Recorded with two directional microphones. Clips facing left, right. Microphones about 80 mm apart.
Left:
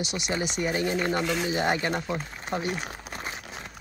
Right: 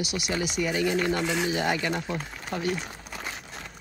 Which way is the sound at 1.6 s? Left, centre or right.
Left.